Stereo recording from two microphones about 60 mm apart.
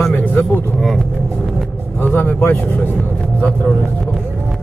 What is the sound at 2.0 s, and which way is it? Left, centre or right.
Speech, left.